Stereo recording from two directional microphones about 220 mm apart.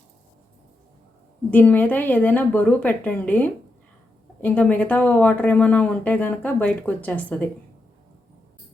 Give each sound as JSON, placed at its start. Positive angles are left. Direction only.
{"t": 1.5, "sound": "speech", "side_deg": 5}